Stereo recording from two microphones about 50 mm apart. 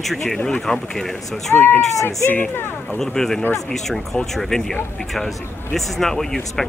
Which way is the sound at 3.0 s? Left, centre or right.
Centre.